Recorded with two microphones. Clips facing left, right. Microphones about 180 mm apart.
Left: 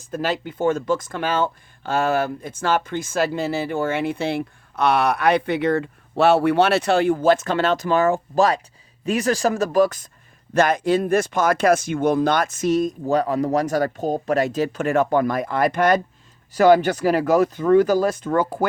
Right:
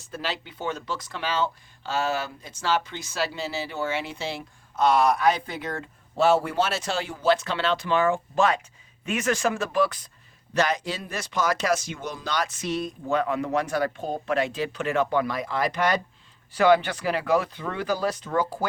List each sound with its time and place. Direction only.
0.1 s speech: 50° left (ahead or behind)